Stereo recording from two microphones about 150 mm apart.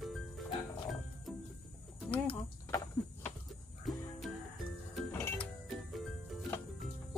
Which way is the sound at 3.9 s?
Centre (ahead or behind).